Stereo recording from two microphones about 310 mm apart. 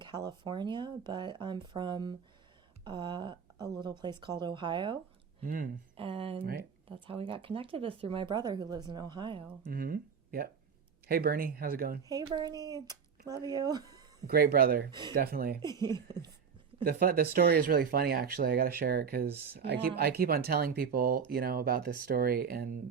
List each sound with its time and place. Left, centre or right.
0.0 s speech: centre
5.4 s speech: right
6.4 s speech: right
6.8 s speech: centre
12.0 s speech: centre
14.3 s speech: right
14.8 s speech: centre
15.1 s speech: right
15.6 s speech: centre
16.8 s speech: right